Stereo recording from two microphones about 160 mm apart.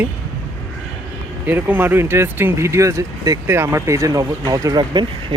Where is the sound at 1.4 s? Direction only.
10° right (ahead or behind).